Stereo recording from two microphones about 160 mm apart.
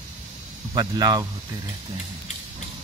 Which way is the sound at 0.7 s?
25° right (ahead or behind).